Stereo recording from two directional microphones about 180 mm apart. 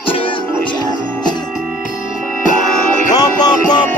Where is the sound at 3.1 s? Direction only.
20° left (ahead or behind).